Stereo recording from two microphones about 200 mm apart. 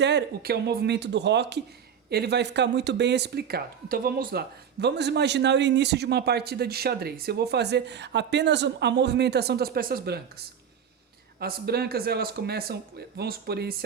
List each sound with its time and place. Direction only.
0.0 s speech: 60° right (ahead or behind)